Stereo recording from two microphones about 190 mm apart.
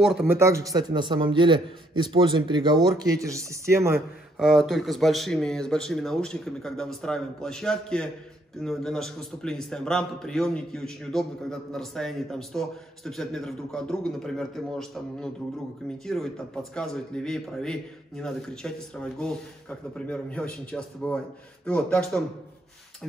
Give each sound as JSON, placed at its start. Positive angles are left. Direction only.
{"t": 0.0, "sound": "a man's voice", "side_deg": 0}
{"t": 0.3, "sound": "a man's voice", "side_deg": -15}
{"t": 4.4, "sound": "a man's voice", "side_deg": 0}